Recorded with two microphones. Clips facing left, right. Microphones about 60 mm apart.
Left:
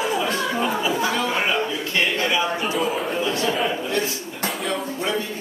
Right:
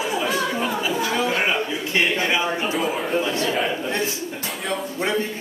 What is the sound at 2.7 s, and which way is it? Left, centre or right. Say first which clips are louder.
A man's voice: right 1 dB; centre.